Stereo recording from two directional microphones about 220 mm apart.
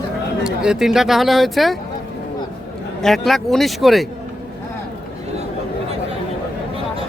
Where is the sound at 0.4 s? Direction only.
5° right (ahead or behind).